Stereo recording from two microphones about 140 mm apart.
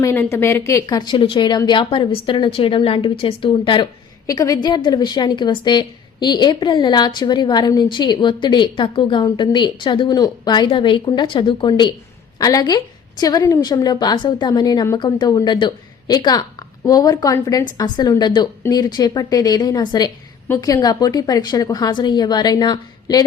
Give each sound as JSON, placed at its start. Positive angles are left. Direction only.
{"t": 0.0, "sound": "a woman's voice", "side_deg": 20}
{"t": 4.3, "sound": "a woman's voice", "side_deg": 25}